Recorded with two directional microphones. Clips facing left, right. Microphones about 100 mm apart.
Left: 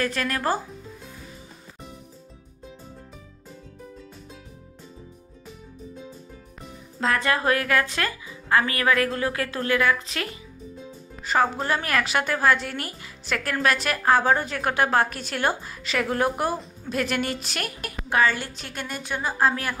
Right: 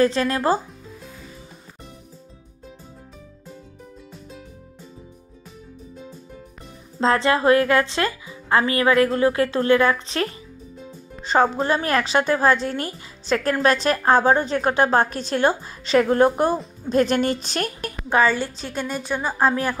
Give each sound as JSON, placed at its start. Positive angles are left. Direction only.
{"t": 0.0, "sound": "speech", "side_deg": -25}
{"t": 7.0, "sound": "a woman's voice", "side_deg": -25}
{"t": 18.2, "sound": "speech", "side_deg": -20}